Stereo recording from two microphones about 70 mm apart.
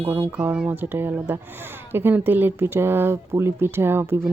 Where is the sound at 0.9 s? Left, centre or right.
Right.